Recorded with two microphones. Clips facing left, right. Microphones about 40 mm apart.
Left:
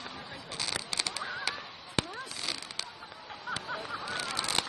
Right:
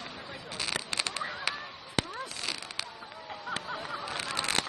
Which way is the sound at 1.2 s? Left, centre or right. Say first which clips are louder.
Right 1 dB; centre.